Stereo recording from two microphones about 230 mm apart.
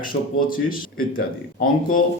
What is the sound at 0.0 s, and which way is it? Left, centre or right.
Speech, left.